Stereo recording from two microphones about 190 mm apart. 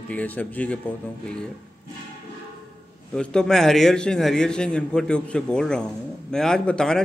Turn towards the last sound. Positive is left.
turn(degrees=5)  # may be behind; listen again after turning